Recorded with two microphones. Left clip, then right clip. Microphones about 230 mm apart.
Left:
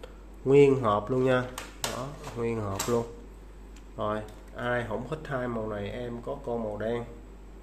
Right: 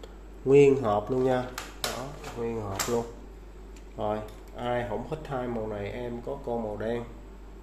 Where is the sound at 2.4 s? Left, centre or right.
Left.